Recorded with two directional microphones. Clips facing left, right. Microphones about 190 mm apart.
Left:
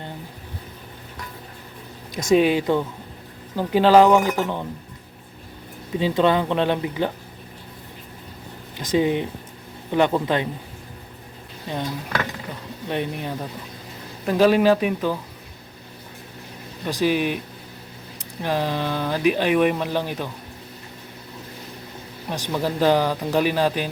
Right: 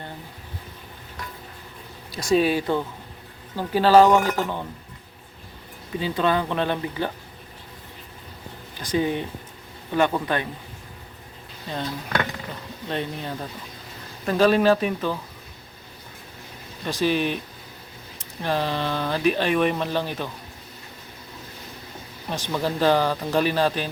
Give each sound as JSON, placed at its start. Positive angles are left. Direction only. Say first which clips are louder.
{"t": 2.1, "sound": "speech", "louder": "left 3 dB", "side_deg": 20}
{"t": 6.0, "sound": "speech", "louder": "left 4 dB", "side_deg": 20}
{"t": 8.8, "sound": "speech", "louder": "left 4 dB", "side_deg": 20}
{"t": 11.7, "sound": "speech", "louder": "left 1 dB", "side_deg": 15}
{"t": 16.8, "sound": "speech", "louder": "left 2 dB", "side_deg": 15}
{"t": 18.4, "sound": "speech", "louder": "left 1 dB", "side_deg": 10}
{"t": 22.3, "sound": "speech", "louder": "left 1 dB", "side_deg": 10}